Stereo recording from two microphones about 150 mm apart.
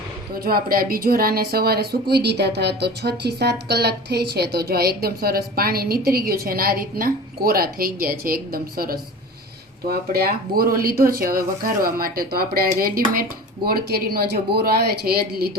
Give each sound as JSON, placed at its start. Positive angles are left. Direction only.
{"t": 0.3, "sound": "a woman's voice", "side_deg": -85}
{"t": 13.7, "sound": "a woman's voice", "side_deg": -90}